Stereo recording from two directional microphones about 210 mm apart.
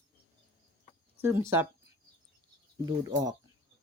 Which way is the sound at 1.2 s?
10° right (ahead or behind).